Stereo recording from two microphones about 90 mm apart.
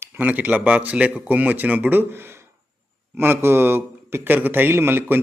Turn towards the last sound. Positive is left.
turn(degrees=-25)  # may be behind; listen again after turning